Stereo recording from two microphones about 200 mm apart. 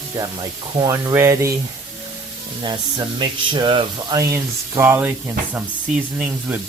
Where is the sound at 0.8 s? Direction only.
15° right (ahead or behind).